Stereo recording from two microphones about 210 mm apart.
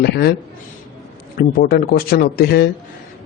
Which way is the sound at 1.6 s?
50° left (ahead or behind).